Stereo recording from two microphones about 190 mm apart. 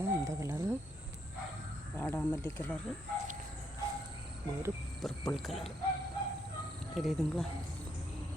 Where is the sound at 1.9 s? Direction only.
10° left (ahead or behind).